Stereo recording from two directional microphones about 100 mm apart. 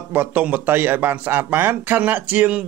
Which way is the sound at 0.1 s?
15° right (ahead or behind).